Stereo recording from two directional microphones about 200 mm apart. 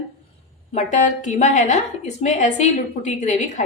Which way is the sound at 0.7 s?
35° left (ahead or behind).